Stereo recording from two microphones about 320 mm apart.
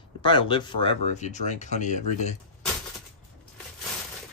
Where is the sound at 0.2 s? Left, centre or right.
Centre.